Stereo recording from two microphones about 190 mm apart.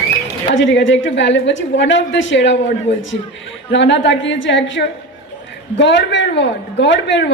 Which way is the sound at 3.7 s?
70° left (ahead or behind).